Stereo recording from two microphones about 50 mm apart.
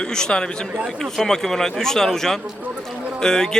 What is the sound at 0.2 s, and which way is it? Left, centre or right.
A man's voice, centre.